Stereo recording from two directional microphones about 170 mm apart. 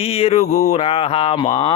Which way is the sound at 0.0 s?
35° left (ahead or behind).